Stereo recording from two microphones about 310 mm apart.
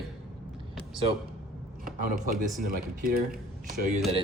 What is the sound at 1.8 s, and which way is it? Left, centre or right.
Speech, right.